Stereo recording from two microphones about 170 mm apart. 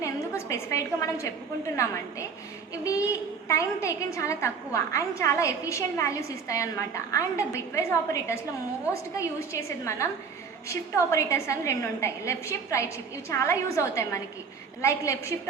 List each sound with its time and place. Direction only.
0.0 s a woman's voice: 15° left (ahead or behind)